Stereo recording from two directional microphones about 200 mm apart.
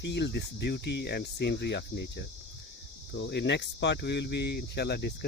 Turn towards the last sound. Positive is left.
turn(degrees=55)  # may be behind; listen again after turning